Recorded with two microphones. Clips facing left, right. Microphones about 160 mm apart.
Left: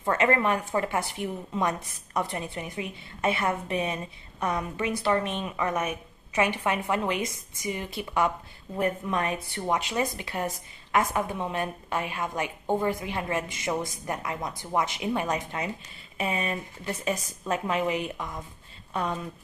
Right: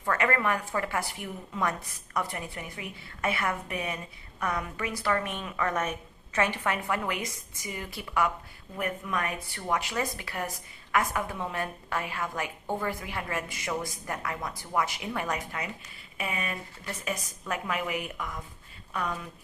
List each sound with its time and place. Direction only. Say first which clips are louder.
0.0 s a woman's voice: left 3 dB; 25° left (ahead or behind)